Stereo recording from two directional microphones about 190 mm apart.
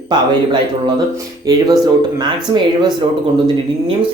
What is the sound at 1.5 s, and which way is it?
Speech, 20° right (ahead or behind).